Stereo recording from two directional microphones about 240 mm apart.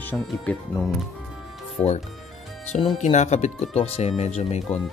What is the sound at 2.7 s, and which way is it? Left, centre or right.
Speech, left.